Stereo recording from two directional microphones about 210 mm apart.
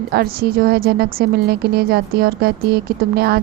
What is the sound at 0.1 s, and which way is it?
A woman's voice, 45° right (ahead or behind).